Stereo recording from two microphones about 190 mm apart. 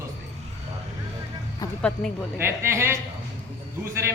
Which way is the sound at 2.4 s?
15° right (ahead or behind).